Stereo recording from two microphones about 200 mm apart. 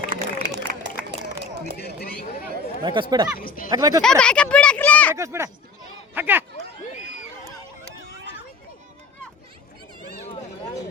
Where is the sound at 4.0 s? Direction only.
5° left (ahead or behind).